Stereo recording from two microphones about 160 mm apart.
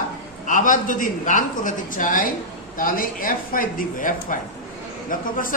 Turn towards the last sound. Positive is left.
turn(degrees=60)  # may be behind; listen again after turning